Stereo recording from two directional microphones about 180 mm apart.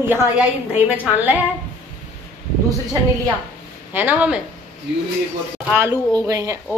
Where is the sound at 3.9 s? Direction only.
10° right (ahead or behind).